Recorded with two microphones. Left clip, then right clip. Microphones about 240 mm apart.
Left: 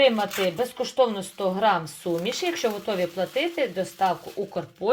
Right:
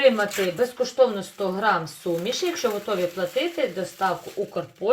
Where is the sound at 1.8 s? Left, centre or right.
Left.